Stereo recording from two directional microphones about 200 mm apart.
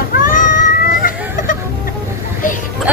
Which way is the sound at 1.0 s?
45° left (ahead or behind).